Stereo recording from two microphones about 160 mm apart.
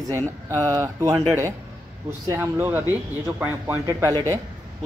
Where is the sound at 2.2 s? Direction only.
15° right (ahead or behind).